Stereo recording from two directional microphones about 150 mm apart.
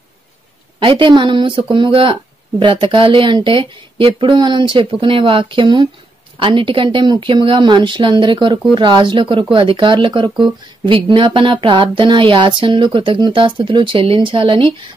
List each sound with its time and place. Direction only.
0.8 s speech: 35° right (ahead or behind)